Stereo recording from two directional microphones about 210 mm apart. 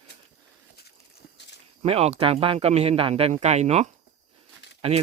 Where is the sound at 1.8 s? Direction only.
30° right (ahead or behind).